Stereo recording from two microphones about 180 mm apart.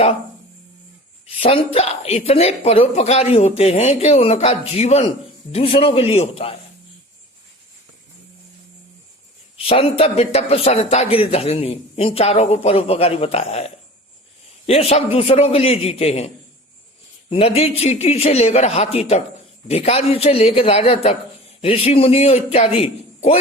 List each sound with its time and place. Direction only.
1.4 s speech: 30° left (ahead or behind)
9.6 s speech: 35° left (ahead or behind)
14.7 s a man's voice: 35° left (ahead or behind)